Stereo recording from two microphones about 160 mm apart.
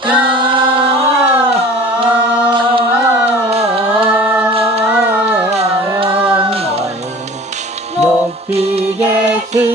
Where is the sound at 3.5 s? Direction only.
40° right (ahead or behind).